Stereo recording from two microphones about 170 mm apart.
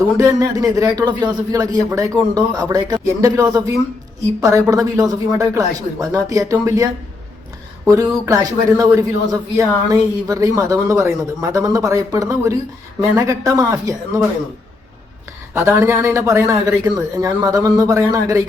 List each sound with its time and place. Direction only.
0.2 s a man's voice: 20° right (ahead or behind)
15.5 s a man's voice: 15° right (ahead or behind)